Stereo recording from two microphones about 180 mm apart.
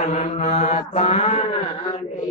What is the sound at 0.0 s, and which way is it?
Mantra, 40° left (ahead or behind).